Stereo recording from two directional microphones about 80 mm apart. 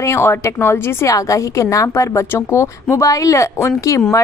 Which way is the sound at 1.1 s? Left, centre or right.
Left.